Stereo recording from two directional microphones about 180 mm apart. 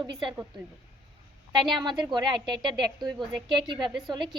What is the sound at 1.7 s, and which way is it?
A woman's voice, 25° right (ahead or behind).